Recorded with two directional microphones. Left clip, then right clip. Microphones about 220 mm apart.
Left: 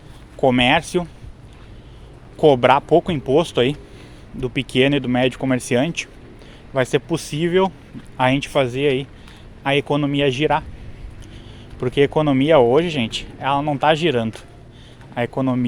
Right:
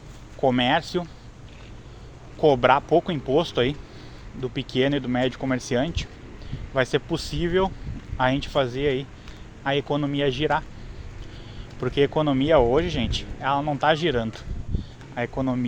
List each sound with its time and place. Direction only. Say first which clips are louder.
0.4 s speech: left 5 dB; 30° left (ahead or behind)
2.4 s speech: left 5 dB; 30° left (ahead or behind)
11.8 s speech: left 5 dB; 20° left (ahead or behind)